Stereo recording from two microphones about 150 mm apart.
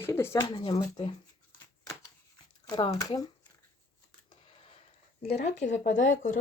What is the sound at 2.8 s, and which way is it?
Speech, 25° left (ahead or behind).